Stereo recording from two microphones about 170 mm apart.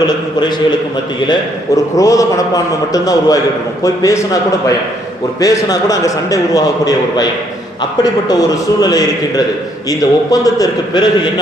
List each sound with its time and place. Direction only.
1.3 s a man's voice: 20° left (ahead or behind)
5.4 s a man's voice: 20° left (ahead or behind)